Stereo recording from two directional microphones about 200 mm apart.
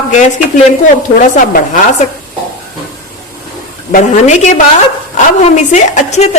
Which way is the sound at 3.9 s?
40° left (ahead or behind).